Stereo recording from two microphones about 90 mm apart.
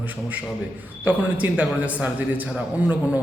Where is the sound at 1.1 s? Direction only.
15° right (ahead or behind).